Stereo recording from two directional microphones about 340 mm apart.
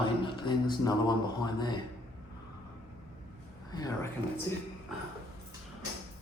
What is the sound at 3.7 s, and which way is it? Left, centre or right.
Speech, centre.